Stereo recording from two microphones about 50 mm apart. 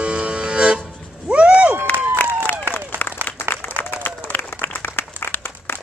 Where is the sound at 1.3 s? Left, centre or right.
Right.